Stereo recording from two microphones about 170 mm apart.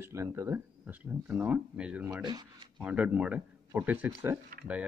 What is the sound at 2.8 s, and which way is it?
Speech, 5° right (ahead or behind).